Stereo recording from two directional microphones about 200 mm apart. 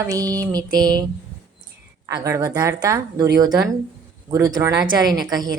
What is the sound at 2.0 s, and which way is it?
A woman's voice, 15° right (ahead or behind).